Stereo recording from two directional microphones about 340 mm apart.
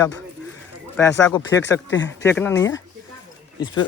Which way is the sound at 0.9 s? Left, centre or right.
Centre.